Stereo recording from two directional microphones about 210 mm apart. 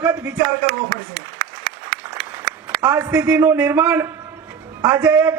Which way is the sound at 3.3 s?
5° right (ahead or behind).